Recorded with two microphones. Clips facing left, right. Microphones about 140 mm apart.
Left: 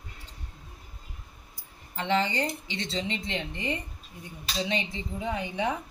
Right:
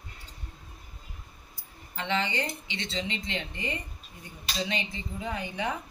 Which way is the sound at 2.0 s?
35° left (ahead or behind).